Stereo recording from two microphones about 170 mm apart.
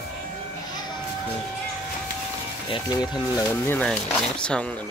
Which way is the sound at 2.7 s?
25° left (ahead or behind).